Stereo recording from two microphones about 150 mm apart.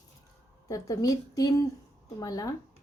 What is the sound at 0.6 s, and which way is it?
A woman's voice, 25° left (ahead or behind).